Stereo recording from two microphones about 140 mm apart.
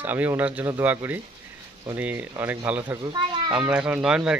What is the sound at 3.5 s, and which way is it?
Speech, 5° right (ahead or behind).